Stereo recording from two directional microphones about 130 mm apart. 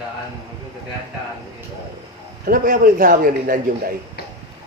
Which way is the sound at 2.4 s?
90° right.